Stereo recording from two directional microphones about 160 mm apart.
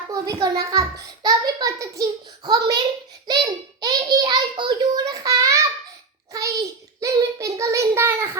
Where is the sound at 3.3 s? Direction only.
25° right (ahead or behind).